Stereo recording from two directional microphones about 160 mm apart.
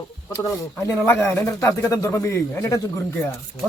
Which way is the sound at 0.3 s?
20° left (ahead or behind).